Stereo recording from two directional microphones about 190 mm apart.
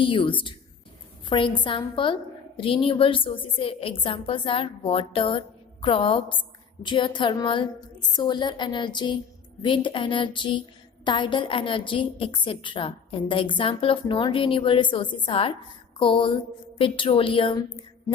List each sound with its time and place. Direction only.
0.0 s a woman's voice: 25° left (ahead or behind)